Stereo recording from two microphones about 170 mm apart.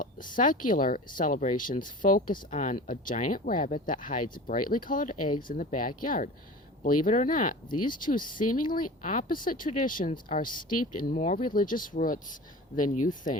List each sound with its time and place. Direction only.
0.3 s speech: 50° left (ahead or behind)
11.2 s speech: 40° left (ahead or behind)
11.4 s speech: 55° left (ahead or behind)